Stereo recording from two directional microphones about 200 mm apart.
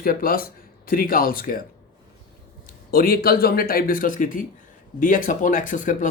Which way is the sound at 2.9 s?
50° left (ahead or behind).